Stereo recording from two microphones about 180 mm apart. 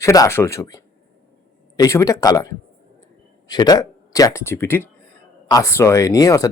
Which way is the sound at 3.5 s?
20° left (ahead or behind).